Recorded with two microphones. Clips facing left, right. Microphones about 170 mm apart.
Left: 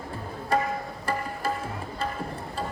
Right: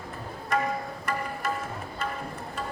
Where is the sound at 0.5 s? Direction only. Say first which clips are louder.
Left 2 dB; 30° left (ahead or behind).